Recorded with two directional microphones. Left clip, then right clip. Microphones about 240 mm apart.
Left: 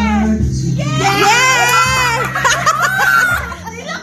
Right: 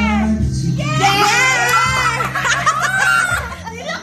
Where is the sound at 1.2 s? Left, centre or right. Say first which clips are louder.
Left 3 dB; centre.